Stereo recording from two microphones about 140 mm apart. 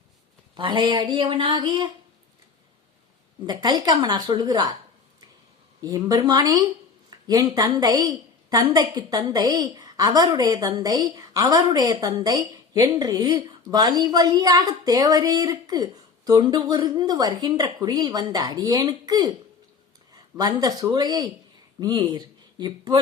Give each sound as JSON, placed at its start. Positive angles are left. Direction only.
{"t": 0.5, "sound": "speech", "side_deg": -35}
{"t": 3.4, "sound": "a woman's voice", "side_deg": -30}
{"t": 5.8, "sound": "a woman's voice", "side_deg": -25}
{"t": 20.3, "sound": "a woman's voice", "side_deg": -30}